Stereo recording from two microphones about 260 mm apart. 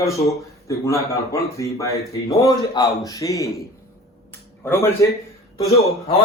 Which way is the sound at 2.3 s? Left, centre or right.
Centre.